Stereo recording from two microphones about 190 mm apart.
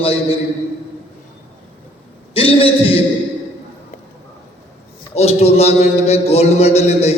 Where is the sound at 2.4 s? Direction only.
30° left (ahead or behind).